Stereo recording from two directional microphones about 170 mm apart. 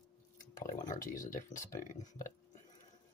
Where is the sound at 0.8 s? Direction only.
50° left (ahead or behind).